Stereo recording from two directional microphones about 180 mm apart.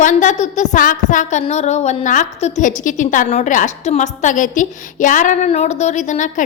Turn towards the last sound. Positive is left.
turn(degrees=45)  # may be behind; listen again after turning